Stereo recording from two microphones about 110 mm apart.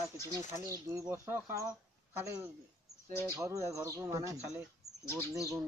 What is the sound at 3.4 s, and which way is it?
Speech, 25° right (ahead or behind).